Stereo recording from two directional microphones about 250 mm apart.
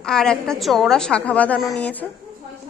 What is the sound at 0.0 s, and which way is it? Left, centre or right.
A woman's voice, centre.